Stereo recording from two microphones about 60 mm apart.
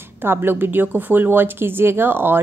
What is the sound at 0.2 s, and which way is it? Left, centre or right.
A woman's voice, right.